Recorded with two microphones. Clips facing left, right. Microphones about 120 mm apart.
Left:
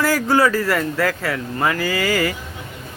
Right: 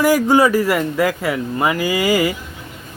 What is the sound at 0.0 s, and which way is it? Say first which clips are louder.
Speech: right 4 dB; 15° right (ahead or behind).